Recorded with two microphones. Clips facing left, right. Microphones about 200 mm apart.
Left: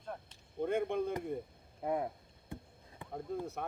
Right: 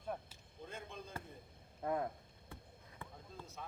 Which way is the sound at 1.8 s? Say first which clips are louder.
Left 3 dB; 15° left (ahead or behind).